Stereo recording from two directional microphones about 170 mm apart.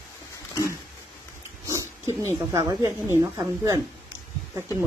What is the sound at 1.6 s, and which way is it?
Speech, 20° right (ahead or behind).